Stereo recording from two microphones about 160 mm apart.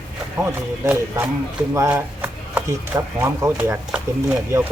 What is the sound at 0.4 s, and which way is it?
Speech, 15° right (ahead or behind).